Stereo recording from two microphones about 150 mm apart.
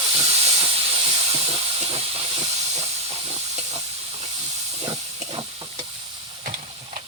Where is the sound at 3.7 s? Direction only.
35° right (ahead or behind).